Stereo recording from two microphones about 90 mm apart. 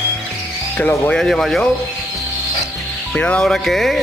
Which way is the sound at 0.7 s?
20° left (ahead or behind).